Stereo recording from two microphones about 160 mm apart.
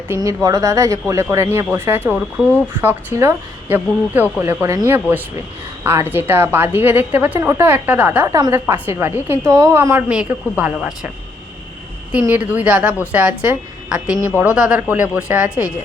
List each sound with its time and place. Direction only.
0.1 s a woman's voice: 20° right (ahead or behind)
12.2 s a woman's voice: 10° right (ahead or behind)